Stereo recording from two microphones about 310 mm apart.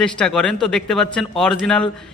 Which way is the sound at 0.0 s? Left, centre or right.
Centre.